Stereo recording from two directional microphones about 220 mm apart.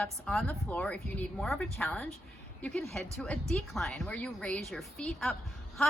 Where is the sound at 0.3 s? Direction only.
5° left (ahead or behind).